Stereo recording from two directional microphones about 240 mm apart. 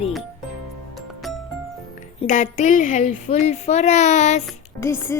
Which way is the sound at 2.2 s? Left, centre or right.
Left.